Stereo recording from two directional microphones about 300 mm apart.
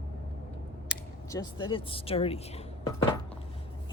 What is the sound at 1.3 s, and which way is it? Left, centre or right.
Speech, centre.